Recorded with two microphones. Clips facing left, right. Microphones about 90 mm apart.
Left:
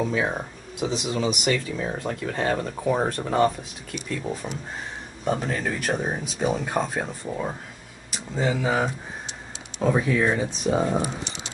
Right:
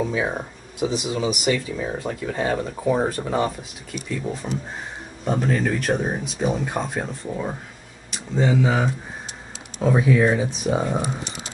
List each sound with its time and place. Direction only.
0.1 s speech: 5° right (ahead or behind)